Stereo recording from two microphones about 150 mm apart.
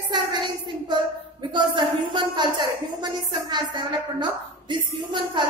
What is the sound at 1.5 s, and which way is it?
A woman's voice, 30° right (ahead or behind).